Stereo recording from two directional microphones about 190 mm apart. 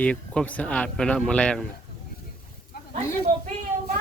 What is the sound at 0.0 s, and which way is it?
Speech, 5° left (ahead or behind).